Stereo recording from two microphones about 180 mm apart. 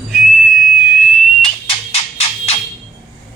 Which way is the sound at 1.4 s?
30° left (ahead or behind).